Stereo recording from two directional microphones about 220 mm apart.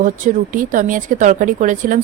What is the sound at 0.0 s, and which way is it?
A woman's voice, 35° right (ahead or behind).